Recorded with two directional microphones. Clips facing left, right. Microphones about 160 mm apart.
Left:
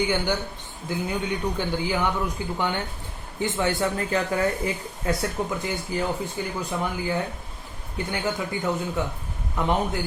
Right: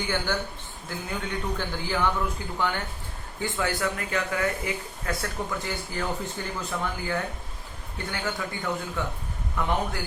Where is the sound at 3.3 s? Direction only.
20° left (ahead or behind).